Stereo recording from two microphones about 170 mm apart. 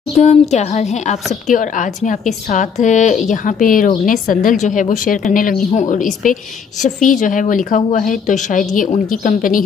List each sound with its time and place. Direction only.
0.2 s a woman's voice: 40° left (ahead or behind)